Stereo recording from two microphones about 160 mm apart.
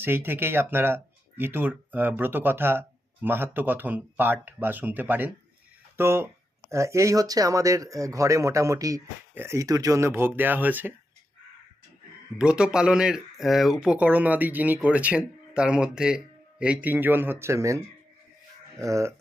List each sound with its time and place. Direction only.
0.0 s speech: 15° right (ahead or behind)
12.4 s speech: 5° right (ahead or behind)